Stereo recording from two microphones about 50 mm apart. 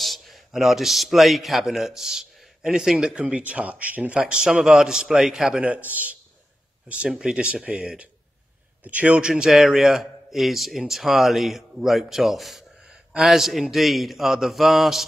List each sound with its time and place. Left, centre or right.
0.0 s a sound: centre
0.5 s a man's voice: centre
3.2 s speech: right
4.1 s a man's voice: right
5.6 s a man's voice: right
7.1 s a man's voice: centre; by 9.2 s right
9.3 s a man's voice: centre